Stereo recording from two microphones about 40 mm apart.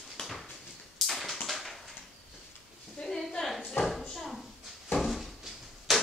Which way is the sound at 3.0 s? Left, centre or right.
Left.